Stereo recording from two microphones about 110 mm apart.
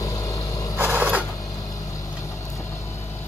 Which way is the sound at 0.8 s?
15° right (ahead or behind).